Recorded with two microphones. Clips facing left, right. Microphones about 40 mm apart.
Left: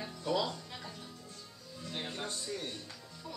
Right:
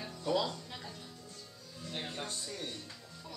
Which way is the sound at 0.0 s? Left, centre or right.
Centre.